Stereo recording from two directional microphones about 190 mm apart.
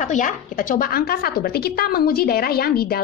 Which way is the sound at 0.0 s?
40° left (ahead or behind).